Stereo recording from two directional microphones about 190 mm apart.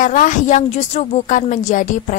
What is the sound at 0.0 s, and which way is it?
A woman's voice, 40° left (ahead or behind).